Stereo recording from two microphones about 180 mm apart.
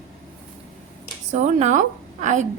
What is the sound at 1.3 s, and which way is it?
A woman's voice, 40° right (ahead or behind).